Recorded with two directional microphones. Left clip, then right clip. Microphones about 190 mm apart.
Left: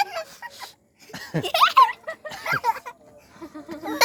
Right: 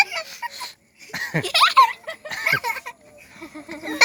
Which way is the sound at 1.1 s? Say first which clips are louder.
Right 6 dB; 10° right (ahead or behind).